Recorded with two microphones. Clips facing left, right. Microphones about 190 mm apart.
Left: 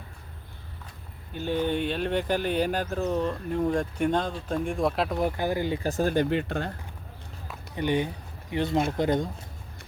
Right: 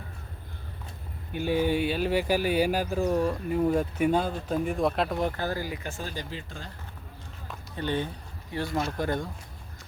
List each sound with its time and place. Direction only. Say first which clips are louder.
1.3 s speech: right 1 dB; 10° right (ahead or behind)
5.4 s speech: left 5 dB; 20° left (ahead or behind); by 6.1 s 35° left (ahead or behind)
6.1 s speech: left 13 dB; 60° left (ahead or behind)
7.8 s speech: left 4 dB; 15° left (ahead or behind)